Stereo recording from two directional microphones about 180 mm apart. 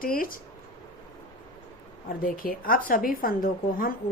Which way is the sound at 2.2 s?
50° left (ahead or behind).